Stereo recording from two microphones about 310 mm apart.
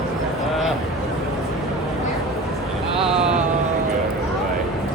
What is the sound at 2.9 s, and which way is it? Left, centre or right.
Vehicle, centre.